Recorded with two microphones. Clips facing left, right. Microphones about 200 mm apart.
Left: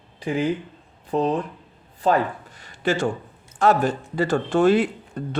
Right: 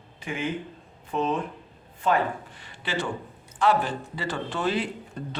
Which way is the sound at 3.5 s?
45° left (ahead or behind).